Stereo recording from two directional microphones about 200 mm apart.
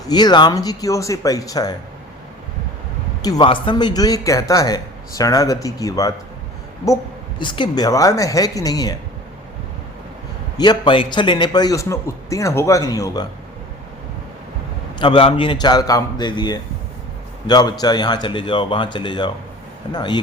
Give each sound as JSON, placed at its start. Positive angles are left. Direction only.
{"t": 0.1, "sound": "speech", "side_deg": 20}
{"t": 3.2, "sound": "speech", "side_deg": 20}
{"t": 10.6, "sound": "a man's voice", "side_deg": 20}
{"t": 14.9, "sound": "a man's voice", "side_deg": 25}